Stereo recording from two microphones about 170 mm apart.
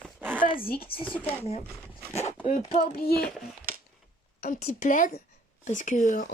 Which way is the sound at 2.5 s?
55° left (ahead or behind).